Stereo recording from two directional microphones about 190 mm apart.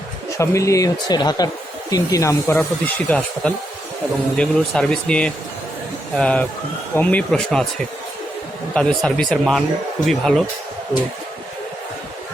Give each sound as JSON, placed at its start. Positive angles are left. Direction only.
{"t": 0.3, "sound": "speech", "side_deg": 15}
{"t": 8.7, "sound": "speech", "side_deg": 5}